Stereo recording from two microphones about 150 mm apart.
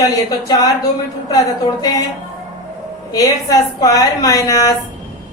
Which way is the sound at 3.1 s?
25° left (ahead or behind).